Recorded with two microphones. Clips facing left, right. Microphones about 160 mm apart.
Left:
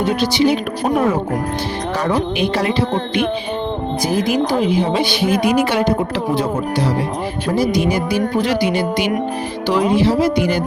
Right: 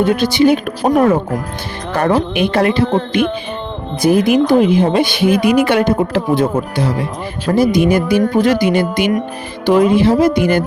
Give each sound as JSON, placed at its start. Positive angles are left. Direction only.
{"t": 0.0, "sound": "speech", "side_deg": -55}
{"t": 0.8, "sound": "speech", "side_deg": -40}
{"t": 2.0, "sound": "a woman's voice", "side_deg": -55}